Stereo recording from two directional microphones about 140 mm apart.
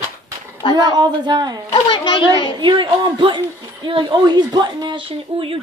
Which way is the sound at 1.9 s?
35° left (ahead or behind).